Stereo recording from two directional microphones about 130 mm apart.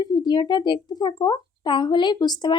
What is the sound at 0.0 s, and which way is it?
Speech, 30° left (ahead or behind).